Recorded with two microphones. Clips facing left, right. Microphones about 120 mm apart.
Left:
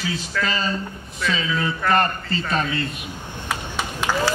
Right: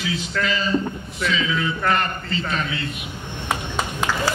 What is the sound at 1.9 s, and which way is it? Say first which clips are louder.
Speech: left 5 dB; 40° left (ahead or behind).